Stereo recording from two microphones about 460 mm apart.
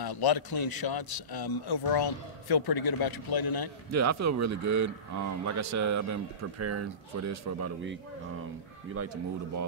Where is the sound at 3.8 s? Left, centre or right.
Right.